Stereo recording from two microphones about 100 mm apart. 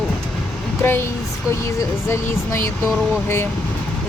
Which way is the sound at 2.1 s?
25° left (ahead or behind).